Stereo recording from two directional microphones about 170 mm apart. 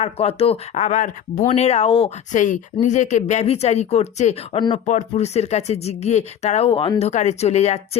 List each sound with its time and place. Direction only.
0.0 s speech: 35° left (ahead or behind)
4.9 s speech: 45° left (ahead or behind)
7.1 s speech: 40° left (ahead or behind)